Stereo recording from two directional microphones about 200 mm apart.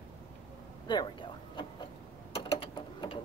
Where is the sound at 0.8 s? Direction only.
20° left (ahead or behind).